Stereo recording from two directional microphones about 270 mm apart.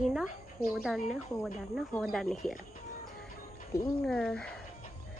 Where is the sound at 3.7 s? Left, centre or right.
Centre.